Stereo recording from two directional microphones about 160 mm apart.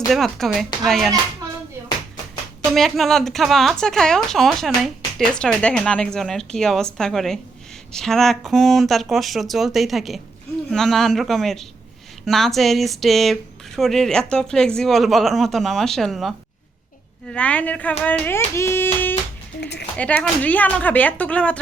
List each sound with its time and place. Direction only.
0.1 s speech: centre (ahead or behind)
2.7 s speech: centre (ahead or behind)
17.3 s speech: 10° left (ahead or behind)
19.5 s speech: 90° left
20.0 s speech: 10° left (ahead or behind)